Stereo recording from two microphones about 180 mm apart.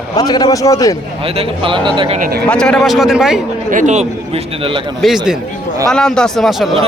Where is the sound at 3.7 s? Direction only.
45° right (ahead or behind).